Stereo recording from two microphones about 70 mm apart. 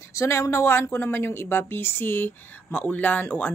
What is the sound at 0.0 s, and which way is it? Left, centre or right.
Speech, left.